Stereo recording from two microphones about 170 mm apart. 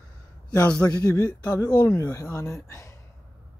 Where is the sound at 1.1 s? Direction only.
20° left (ahead or behind).